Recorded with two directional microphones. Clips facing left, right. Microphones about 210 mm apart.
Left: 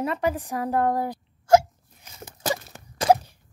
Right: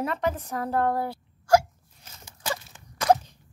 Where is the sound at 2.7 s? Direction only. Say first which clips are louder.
Left 7 dB; 45° left (ahead or behind).